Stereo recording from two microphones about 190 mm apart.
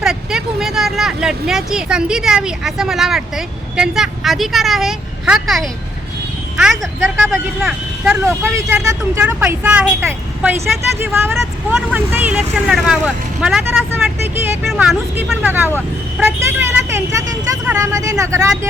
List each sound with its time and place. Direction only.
0.0 s speech: 5° right (ahead or behind)